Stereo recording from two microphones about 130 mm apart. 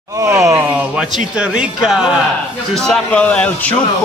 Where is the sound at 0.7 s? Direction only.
5° right (ahead or behind).